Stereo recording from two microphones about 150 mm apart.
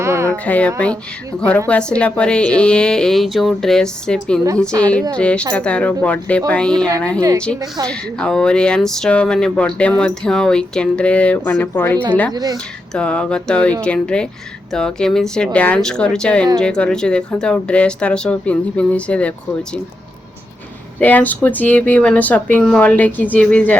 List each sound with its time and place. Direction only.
0.0 s music: 20° right (ahead or behind)
0.4 s a woman's voice: 10° left (ahead or behind)
7.2 s a woman's voice: 20° right (ahead or behind)
7.9 s a woman's voice: 5° left (ahead or behind)
12.3 s a woman's voice: 25° right (ahead or behind)
12.9 s a woman's voice: 5° left (ahead or behind)
21.0 s a woman's voice: 10° left (ahead or behind)